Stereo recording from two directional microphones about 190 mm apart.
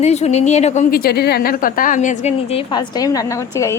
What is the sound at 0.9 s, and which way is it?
A woman's voice, 55° left (ahead or behind).